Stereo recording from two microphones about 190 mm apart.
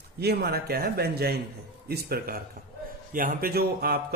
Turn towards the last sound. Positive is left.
turn(degrees=-55)  # may be behind; listen again after turning